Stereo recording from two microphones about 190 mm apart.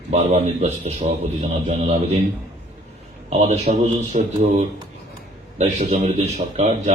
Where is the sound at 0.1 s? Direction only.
35° right (ahead or behind).